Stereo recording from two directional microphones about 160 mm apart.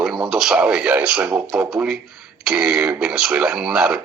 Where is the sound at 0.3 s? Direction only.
5° right (ahead or behind).